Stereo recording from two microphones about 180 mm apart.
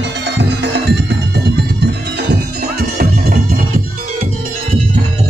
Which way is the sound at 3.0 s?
55° right (ahead or behind).